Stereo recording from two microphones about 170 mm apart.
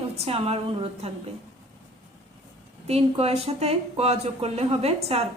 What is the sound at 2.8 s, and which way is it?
A woman's voice, 35° right (ahead or behind).